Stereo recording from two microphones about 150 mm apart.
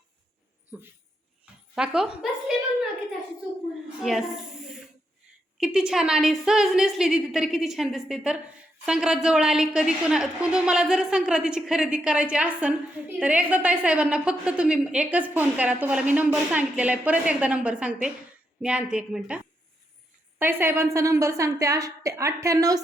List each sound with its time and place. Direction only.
1.7 s a woman's voice: 5° right (ahead or behind)
5.5 s a woman's voice: 5° right (ahead or behind)
20.4 s a woman's voice: 15° right (ahead or behind)